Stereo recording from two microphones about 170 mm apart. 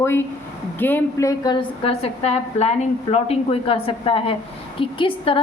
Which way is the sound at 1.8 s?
35° left (ahead or behind).